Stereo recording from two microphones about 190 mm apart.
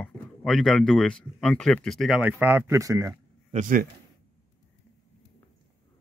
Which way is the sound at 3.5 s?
45° right (ahead or behind).